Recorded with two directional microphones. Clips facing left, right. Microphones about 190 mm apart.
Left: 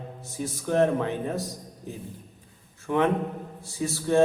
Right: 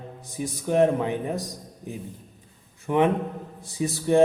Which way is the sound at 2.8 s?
15° right (ahead or behind).